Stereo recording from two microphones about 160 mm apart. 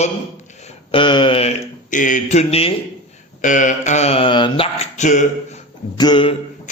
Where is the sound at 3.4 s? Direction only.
55° left (ahead or behind); by 4.9 s 35° left (ahead or behind).